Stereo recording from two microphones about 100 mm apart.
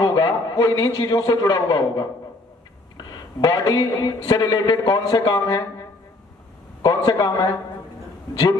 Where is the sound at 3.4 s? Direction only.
45° left (ahead or behind).